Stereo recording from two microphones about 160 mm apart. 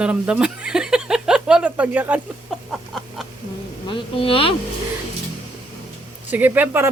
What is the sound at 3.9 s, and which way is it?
Speech, 35° left (ahead or behind).